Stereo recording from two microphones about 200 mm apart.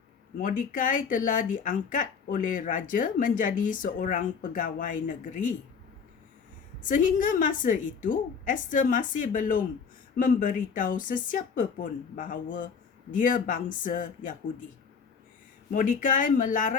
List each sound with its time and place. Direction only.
0.3 s speech: 40° left (ahead or behind)
6.8 s speech: 40° left (ahead or behind)
15.7 s speech: 40° left (ahead or behind)